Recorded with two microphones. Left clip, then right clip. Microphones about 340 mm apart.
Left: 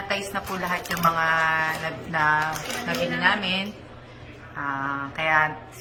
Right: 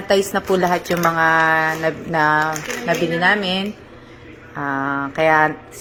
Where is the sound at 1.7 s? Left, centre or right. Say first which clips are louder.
Right 8 dB; centre.